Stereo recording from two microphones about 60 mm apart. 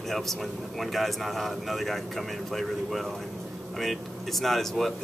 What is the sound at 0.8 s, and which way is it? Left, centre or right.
A man's voice, centre.